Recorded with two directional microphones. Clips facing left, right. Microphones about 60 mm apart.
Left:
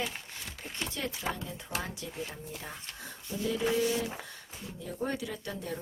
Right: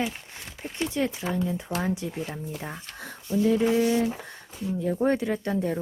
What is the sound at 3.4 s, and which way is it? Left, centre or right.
Speech, right.